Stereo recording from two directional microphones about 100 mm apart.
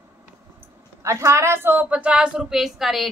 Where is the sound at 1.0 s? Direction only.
30° right (ahead or behind).